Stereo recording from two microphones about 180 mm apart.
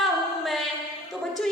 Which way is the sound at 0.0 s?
Centre (ahead or behind).